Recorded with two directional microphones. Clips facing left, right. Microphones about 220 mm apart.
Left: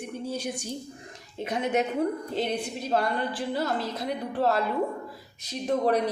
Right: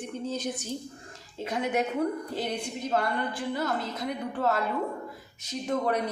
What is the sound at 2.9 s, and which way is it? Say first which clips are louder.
Speech: left 2 dB; 30° left (ahead or behind).